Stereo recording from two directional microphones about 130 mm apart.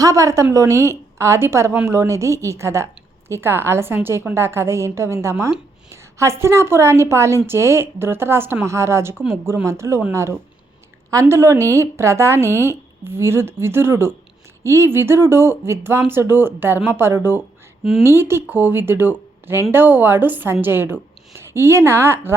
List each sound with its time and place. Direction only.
0.0 s a woman's voice: 25° right (ahead or behind)